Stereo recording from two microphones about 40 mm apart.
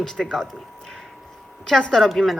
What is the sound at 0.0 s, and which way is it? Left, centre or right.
Speech, centre.